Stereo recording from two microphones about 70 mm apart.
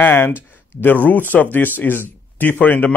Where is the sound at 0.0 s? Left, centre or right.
Left.